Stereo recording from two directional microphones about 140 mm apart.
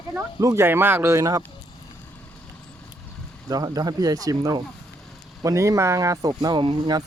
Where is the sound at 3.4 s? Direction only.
25° right (ahead or behind).